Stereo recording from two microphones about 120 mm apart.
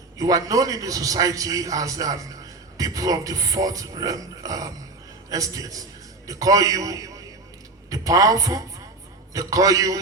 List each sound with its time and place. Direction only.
0.2 s a man's voice: 30° right (ahead or behind)